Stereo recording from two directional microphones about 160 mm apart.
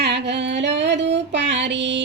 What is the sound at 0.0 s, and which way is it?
Female singing, 90° right.